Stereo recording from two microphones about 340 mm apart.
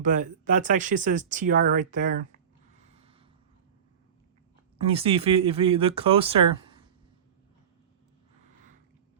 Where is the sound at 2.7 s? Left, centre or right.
Centre.